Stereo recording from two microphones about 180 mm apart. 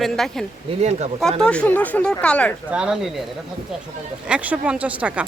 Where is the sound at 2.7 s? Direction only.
5° right (ahead or behind).